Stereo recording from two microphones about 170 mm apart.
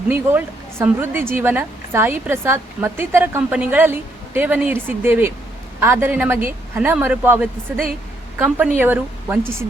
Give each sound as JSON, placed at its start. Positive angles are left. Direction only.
{"t": 0.1, "sound": "a woman's voice", "side_deg": -10}